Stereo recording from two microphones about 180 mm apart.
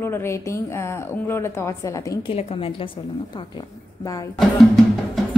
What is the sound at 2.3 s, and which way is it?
Speech, 35° left (ahead or behind).